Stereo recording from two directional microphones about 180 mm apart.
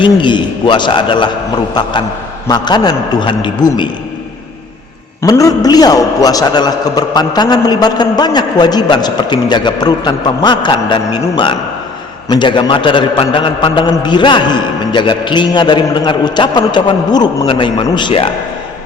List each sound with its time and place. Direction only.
0.0 s a man's voice: 25° left (ahead or behind)
2.5 s a man's voice: 25° left (ahead or behind)
5.2 s a man's voice: 20° left (ahead or behind)